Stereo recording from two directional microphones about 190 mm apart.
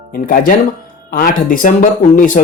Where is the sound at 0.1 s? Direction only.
45° left (ahead or behind).